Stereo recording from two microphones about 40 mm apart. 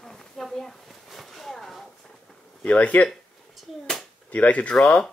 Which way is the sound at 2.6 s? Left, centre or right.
Left.